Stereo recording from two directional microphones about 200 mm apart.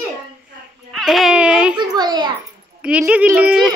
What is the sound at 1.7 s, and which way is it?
Speech, 20° right (ahead or behind).